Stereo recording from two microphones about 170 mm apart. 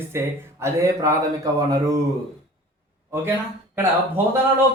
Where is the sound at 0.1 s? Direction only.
15° right (ahead or behind).